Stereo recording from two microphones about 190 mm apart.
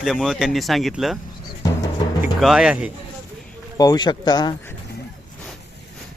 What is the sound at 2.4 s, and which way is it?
Speech, centre (ahead or behind).